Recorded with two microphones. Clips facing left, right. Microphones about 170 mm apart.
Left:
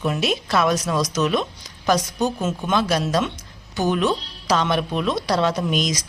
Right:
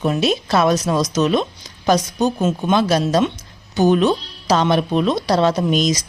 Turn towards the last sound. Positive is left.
turn(degrees=-30)  # may be behind; listen again after turning